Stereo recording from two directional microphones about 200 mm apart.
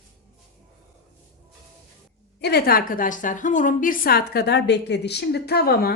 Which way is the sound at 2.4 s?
55° left (ahead or behind).